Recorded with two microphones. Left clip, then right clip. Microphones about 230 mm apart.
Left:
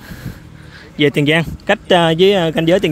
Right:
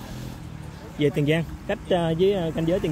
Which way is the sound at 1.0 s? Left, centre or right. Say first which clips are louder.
Left 10 dB; left.